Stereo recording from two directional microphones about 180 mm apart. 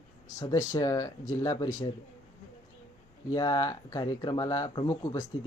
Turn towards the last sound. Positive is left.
turn(degrees=20)  # may be behind; listen again after turning